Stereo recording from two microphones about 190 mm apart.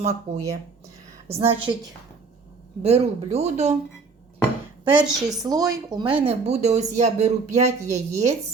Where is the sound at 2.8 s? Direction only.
35° right (ahead or behind).